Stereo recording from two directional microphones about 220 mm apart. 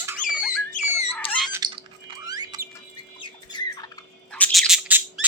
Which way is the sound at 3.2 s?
20° left (ahead or behind).